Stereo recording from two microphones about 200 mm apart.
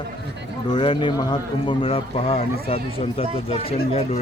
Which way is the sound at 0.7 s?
25° left (ahead or behind).